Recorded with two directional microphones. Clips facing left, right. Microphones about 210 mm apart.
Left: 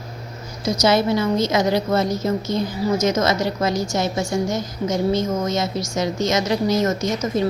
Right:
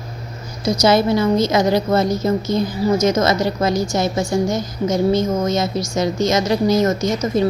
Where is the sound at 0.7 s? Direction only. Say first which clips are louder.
Right 3 dB; 35° right (ahead or behind).